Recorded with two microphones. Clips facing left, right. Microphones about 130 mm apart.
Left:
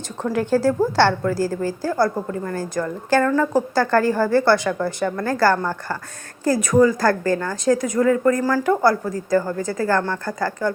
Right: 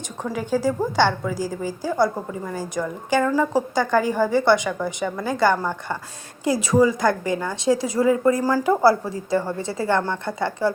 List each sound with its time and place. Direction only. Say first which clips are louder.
0.3 s a woman's voice: left 4 dB; 10° right (ahead or behind)
1.9 s a woman's voice: even; centre (ahead or behind)
9.3 s speech: left 3 dB; 30° right (ahead or behind)